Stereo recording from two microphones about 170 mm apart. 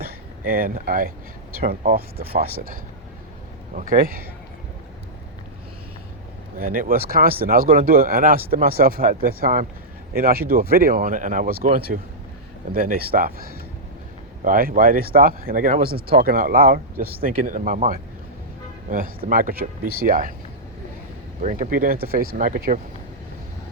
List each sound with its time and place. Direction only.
0.0 s a sound: 60° right (ahead or behind)
1.5 s speech: 60° right (ahead or behind)
3.8 s speech: 55° right (ahead or behind)
6.6 s speech: 55° right (ahead or behind)
14.4 s speech: 55° right (ahead or behind)
21.4 s speech: 45° right (ahead or behind)